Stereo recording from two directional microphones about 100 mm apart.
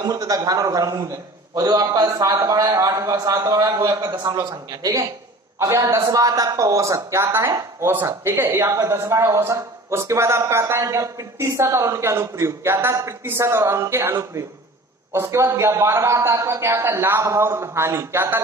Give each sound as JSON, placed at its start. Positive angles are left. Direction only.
{"t": 0.0, "sound": "a man's voice", "side_deg": -35}